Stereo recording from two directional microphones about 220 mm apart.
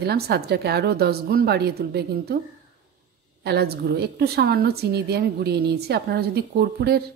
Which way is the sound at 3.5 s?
45° right (ahead or behind).